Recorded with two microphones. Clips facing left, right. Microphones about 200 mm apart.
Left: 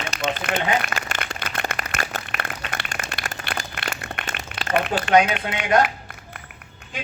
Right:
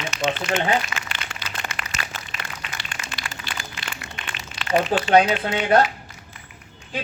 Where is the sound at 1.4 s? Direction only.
55° left (ahead or behind).